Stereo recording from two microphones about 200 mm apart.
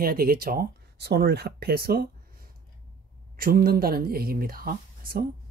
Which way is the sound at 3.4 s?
50° right (ahead or behind).